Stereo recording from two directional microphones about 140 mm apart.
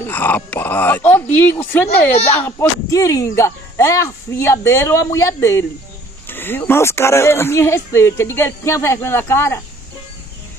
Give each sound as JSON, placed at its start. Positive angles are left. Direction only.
{"t": 0.0, "sound": "speech", "side_deg": 15}